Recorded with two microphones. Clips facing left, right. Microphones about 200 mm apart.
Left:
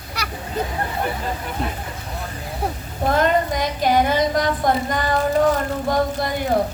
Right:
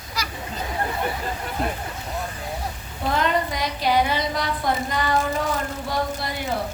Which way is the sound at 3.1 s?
50° left (ahead or behind).